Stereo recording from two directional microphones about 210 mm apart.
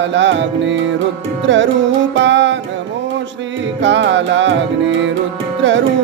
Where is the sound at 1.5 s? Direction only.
60° right (ahead or behind).